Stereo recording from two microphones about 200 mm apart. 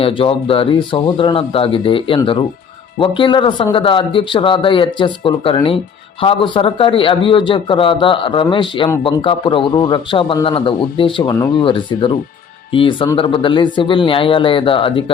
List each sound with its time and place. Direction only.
0.0 s speech: 25° left (ahead or behind)